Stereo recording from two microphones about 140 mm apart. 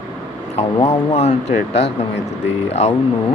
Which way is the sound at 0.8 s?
50° left (ahead or behind).